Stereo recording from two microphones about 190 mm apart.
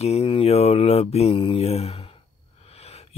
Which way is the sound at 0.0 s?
35° left (ahead or behind).